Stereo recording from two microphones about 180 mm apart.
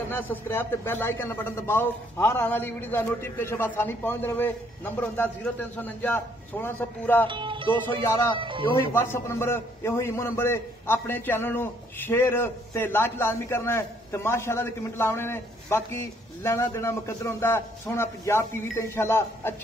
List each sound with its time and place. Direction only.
0.1 s a man's voice: 10° left (ahead or behind)
7.2 s speech: 25° right (ahead or behind)
8.9 s a man's voice: 15° left (ahead or behind)